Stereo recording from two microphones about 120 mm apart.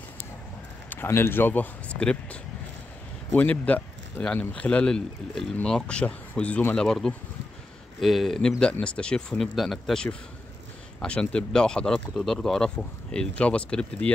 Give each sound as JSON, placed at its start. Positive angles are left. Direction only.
{"t": 0.8, "sound": "speech", "side_deg": 20}
{"t": 3.3, "sound": "speech", "side_deg": 15}